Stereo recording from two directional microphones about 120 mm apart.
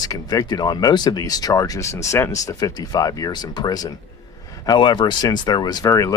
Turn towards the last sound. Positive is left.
turn(degrees=25)  # may be behind; listen again after turning